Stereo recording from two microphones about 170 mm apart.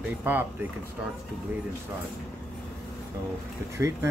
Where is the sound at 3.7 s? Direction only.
15° right (ahead or behind).